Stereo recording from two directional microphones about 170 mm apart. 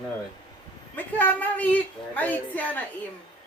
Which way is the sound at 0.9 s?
10° left (ahead or behind).